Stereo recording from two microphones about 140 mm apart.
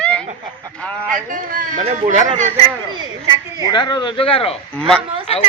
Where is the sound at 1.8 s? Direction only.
55° right (ahead or behind).